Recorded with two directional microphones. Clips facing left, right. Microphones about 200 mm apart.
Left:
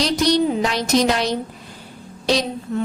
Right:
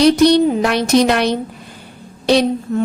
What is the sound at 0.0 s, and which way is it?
A woman's voice, 60° right (ahead or behind).